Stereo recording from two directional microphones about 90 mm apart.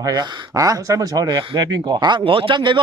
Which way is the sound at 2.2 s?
75° right (ahead or behind).